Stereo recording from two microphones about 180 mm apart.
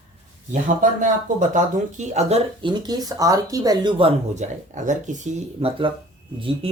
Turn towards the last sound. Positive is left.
turn(degrees=-30)  # may be behind; listen again after turning